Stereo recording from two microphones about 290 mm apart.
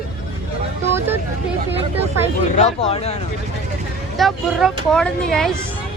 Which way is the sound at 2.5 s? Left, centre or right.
Left.